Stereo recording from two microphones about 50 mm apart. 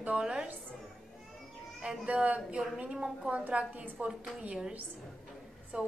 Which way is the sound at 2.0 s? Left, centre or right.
Right.